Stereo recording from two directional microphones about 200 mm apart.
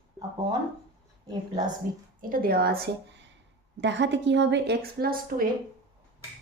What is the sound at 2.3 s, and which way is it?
A woman's voice, 45° right (ahead or behind).